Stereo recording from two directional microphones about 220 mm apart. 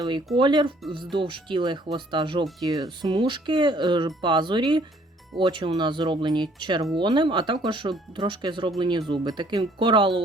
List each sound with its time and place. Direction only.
0.3 s speech: 20° right (ahead or behind)